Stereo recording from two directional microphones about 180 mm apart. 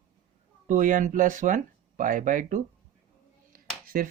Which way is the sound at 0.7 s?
45° right (ahead or behind).